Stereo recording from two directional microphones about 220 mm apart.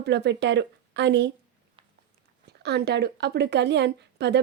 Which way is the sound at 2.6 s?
50° right (ahead or behind).